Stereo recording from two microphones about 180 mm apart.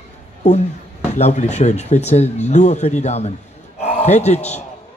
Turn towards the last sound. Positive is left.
turn(degrees=40)  # may be behind; listen again after turning